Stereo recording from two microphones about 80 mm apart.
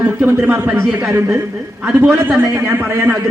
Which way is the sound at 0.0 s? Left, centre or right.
Right.